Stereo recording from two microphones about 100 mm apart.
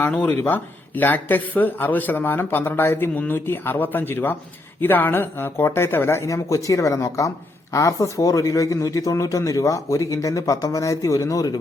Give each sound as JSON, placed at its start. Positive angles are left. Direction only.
{"t": 0.0, "sound": "speech", "side_deg": 15}